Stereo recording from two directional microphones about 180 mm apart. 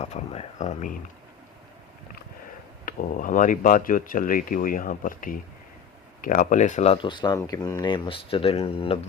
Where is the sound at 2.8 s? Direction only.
50° left (ahead or behind).